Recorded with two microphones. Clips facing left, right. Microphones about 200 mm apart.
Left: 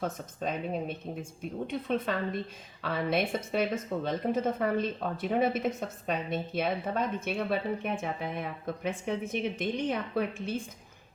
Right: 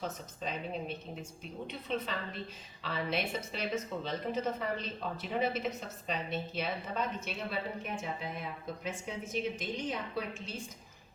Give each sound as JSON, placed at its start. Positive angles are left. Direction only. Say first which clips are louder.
{"t": 0.0, "sound": "a woman's voice", "louder": "left 5 dB", "side_deg": 50}